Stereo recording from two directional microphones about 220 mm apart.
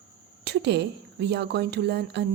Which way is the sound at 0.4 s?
50° right (ahead or behind).